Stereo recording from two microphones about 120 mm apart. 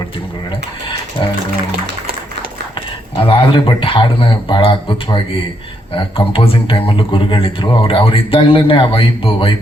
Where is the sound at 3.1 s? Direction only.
50° left (ahead or behind).